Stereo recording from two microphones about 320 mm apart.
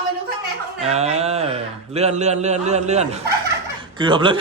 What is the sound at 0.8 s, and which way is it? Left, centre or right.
A man's voice, centre.